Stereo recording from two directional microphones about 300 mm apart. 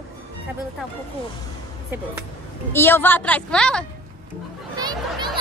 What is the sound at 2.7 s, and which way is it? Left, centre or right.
A woman's voice, centre.